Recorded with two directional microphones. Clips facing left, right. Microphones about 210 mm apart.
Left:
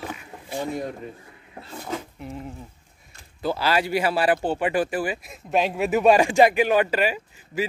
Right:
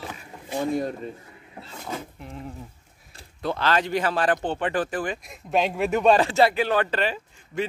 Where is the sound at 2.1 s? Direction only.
Centre (ahead or behind).